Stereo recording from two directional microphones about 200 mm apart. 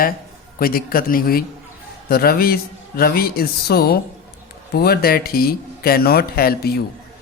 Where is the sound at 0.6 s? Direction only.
45° left (ahead or behind).